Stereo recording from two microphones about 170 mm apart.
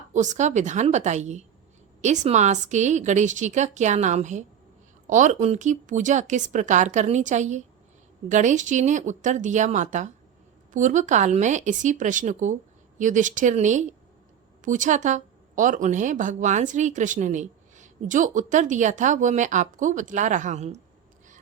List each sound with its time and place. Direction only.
0.1 s a woman's voice: 45° right (ahead or behind)